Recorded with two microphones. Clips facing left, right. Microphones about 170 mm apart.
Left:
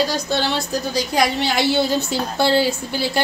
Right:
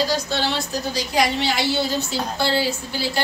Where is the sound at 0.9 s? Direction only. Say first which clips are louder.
Left 2 dB; 50° left (ahead or behind).